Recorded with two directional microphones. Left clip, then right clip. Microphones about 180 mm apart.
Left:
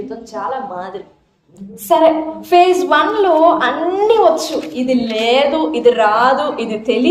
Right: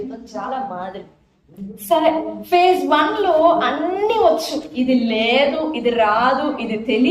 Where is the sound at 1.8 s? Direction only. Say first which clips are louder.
Left 5 dB; 40° left (ahead or behind).